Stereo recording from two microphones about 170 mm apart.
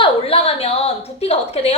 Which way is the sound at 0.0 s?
35° left (ahead or behind).